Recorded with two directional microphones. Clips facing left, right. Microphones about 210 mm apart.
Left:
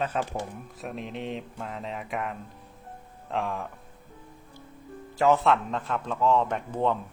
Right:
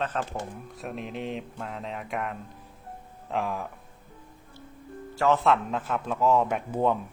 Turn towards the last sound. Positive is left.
turn(degrees=-10)  # may be behind; listen again after turning